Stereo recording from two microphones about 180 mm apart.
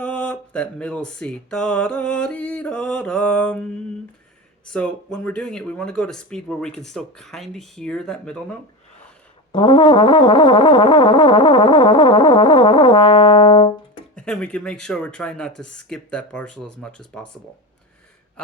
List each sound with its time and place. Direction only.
0.0 s music: 5° left (ahead or behind)
9.5 s brass instrument: 25° left (ahead or behind)
14.2 s music: 5° left (ahead or behind)